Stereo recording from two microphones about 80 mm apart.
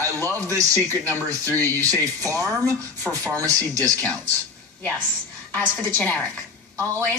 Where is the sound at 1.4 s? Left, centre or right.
Left.